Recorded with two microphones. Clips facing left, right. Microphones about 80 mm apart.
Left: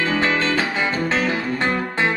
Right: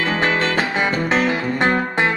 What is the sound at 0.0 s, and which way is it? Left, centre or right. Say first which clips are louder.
Music: right 1 dB; right.